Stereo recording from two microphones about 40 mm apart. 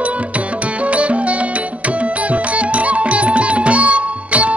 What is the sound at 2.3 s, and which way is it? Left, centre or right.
Music, right.